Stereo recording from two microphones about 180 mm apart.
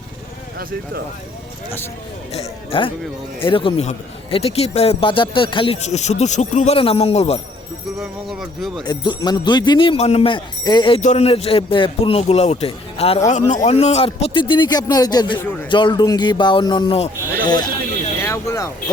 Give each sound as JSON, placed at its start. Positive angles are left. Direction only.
{"t": 2.3, "sound": "a man's voice", "side_deg": 35}
{"t": 7.9, "sound": "speech", "side_deg": 0}
{"t": 8.8, "sound": "speech", "side_deg": 25}
{"t": 11.0, "sound": "a man's voice", "side_deg": 35}